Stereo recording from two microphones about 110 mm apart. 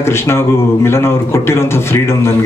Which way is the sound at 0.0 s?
25° left (ahead or behind).